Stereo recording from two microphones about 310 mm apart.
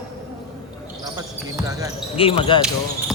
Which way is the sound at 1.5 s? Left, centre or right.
Centre.